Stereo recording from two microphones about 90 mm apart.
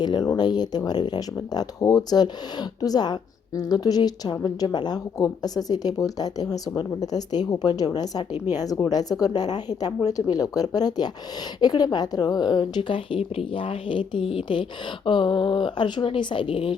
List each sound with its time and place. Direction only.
0.0 s a woman's voice: 50° left (ahead or behind); by 16.7 s 75° left (ahead or behind)